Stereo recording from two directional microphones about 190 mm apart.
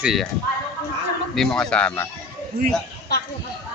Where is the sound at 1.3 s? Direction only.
5° left (ahead or behind).